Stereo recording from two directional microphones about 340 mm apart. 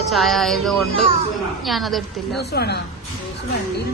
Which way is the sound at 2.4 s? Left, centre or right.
Left.